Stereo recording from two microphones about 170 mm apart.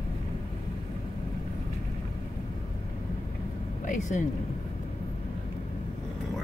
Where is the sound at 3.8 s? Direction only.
50° left (ahead or behind).